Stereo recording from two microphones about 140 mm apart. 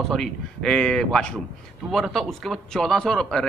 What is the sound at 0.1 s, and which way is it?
A man's voice, 5° left (ahead or behind).